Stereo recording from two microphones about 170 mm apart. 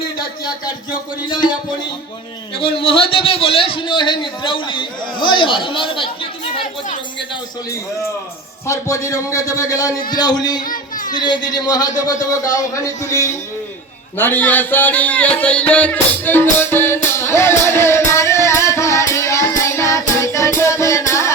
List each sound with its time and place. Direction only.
0.2 s a man's voice: 25° left (ahead or behind)
2.6 s a man's voice: 30° left (ahead or behind)
8.6 s a man's voice: 20° left (ahead or behind)
10.6 s a sound: 50° left (ahead or behind)
11.2 s a man's voice: 25° left (ahead or behind)
13.1 s music: 20° left (ahead or behind)